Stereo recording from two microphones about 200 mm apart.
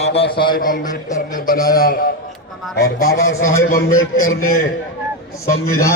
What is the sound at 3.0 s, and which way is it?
Speech, 85° left.